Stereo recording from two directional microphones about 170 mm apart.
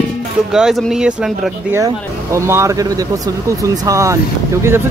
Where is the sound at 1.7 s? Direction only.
15° right (ahead or behind).